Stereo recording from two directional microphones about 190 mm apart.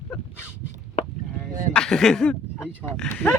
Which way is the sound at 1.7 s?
5° left (ahead or behind).